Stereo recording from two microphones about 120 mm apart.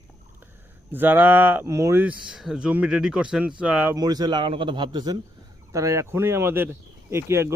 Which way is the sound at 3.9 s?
35° right (ahead or behind).